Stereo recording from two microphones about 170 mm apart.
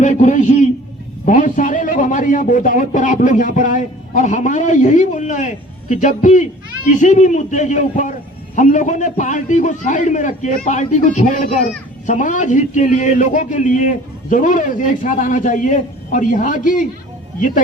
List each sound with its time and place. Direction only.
0.0 s a man's voice: 45° left (ahead or behind)